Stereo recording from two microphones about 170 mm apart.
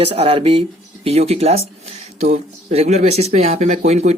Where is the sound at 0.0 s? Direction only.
35° right (ahead or behind).